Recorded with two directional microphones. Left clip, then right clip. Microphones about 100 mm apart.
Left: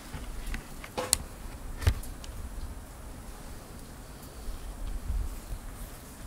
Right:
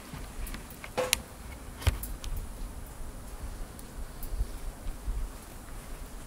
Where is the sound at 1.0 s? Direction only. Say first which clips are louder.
Right 4 dB; 35° right (ahead or behind).